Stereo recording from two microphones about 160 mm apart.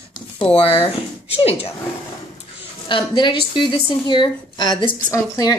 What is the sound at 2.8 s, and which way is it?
A woman's voice, 30° left (ahead or behind).